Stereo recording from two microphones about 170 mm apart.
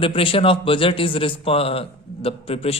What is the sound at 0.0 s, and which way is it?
A man's voice, 30° left (ahead or behind).